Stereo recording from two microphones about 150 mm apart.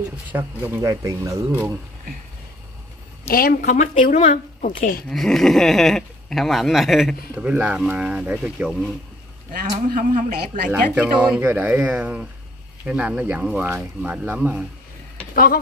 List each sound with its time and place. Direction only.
0.3 s speech: 15° right (ahead or behind)
3.3 s speech: 75° left (ahead or behind)
5.1 s speech: centre (ahead or behind)
9.5 s speech: 60° right (ahead or behind)
11.0 s speech: 10° right (ahead or behind)
15.3 s speech: 90° left